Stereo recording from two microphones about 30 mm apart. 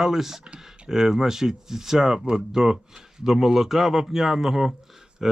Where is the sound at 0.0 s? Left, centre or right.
Centre.